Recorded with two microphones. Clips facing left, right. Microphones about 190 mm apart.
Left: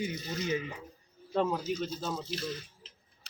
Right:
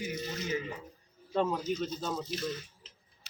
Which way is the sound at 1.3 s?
5° left (ahead or behind).